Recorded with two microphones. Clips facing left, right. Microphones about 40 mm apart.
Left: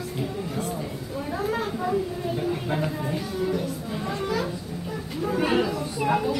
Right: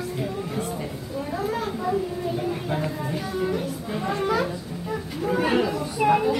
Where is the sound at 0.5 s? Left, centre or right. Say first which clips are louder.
Right 1 dB; centre.